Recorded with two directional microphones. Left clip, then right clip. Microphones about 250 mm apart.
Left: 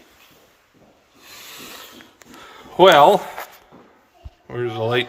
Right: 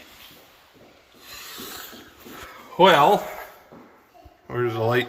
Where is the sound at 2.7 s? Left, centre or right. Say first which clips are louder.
Left 4 dB; centre.